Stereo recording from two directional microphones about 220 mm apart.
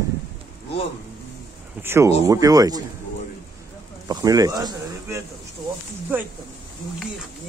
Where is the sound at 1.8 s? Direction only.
10° right (ahead or behind).